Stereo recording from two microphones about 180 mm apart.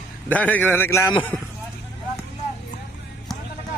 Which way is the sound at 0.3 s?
10° left (ahead or behind).